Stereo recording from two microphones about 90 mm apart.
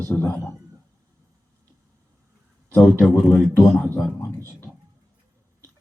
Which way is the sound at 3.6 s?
25° left (ahead or behind).